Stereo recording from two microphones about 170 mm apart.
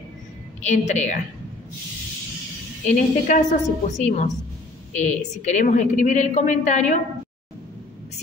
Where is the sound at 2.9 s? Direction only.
45° left (ahead or behind).